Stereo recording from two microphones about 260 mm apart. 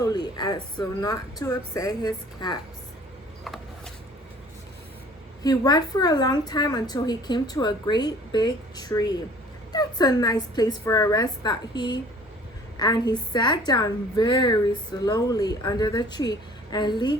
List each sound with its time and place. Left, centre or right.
0.0 s a woman's voice: centre
5.4 s a woman's voice: centre